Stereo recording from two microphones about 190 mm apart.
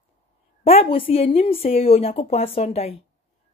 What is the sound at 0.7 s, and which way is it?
A woman's voice, 30° left (ahead or behind).